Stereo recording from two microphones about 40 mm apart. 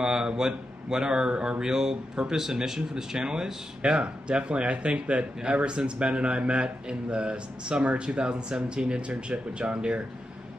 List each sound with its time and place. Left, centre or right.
0.0 s speech: centre